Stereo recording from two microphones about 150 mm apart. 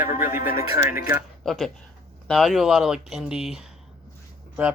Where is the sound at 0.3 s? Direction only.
75° left (ahead or behind).